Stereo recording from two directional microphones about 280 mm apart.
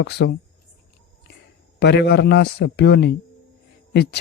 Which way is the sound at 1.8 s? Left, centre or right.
Left.